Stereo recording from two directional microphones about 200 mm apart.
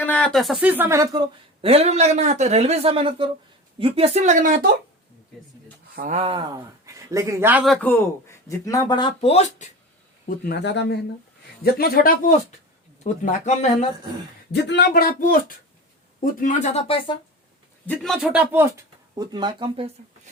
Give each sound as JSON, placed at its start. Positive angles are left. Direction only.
{"t": 0.0, "sound": "speech", "side_deg": 5}
{"t": 6.0, "sound": "speech", "side_deg": -35}
{"t": 10.2, "sound": "speech", "side_deg": 50}
{"t": 11.6, "sound": "speech", "side_deg": 45}
{"t": 13.1, "sound": "speech", "side_deg": 35}
{"t": 14.5, "sound": "speech", "side_deg": 60}
{"t": 17.8, "sound": "speech", "side_deg": 0}
{"t": 19.1, "sound": "speech", "side_deg": -20}